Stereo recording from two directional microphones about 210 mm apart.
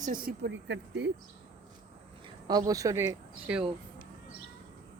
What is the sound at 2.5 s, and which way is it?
Speech, 20° right (ahead or behind).